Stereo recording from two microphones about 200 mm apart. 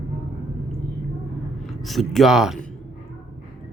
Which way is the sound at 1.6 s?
Centre (ahead or behind).